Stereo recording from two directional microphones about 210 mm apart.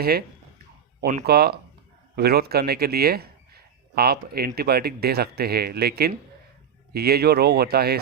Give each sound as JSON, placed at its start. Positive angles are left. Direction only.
{"t": 0.0, "sound": "speech", "side_deg": -45}